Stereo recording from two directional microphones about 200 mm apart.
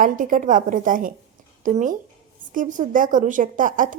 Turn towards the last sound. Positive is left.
turn(degrees=-40)  # may be behind; listen again after turning